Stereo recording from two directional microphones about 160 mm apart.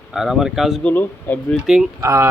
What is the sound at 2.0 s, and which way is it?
Speech, 20° right (ahead or behind).